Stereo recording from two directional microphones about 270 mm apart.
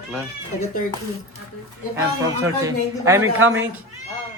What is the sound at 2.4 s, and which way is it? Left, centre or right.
Speech, centre.